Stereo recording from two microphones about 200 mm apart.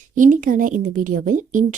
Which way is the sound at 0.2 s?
40° right (ahead or behind).